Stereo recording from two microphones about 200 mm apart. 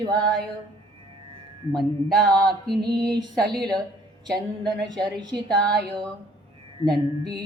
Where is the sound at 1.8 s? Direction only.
Centre (ahead or behind).